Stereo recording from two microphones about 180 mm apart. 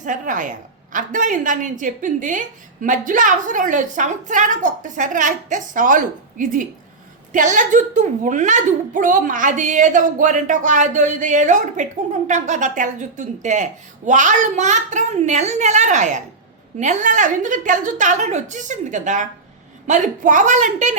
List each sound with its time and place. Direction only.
0.0 s a woman's voice: 45° right (ahead or behind)